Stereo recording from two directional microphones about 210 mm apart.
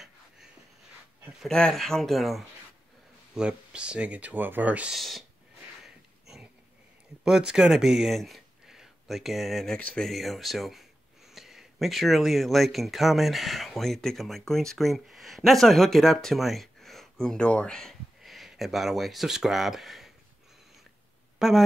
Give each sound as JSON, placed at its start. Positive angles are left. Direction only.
{"t": 1.2, "sound": "speech", "side_deg": 0}
{"t": 5.9, "sound": "a sound", "side_deg": 0}
{"t": 7.2, "sound": "speech", "side_deg": -5}
{"t": 21.4, "sound": "speech", "side_deg": 0}